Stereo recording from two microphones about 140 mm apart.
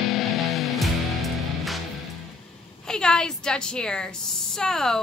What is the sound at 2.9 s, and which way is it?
A woman's voice, 5° left (ahead or behind).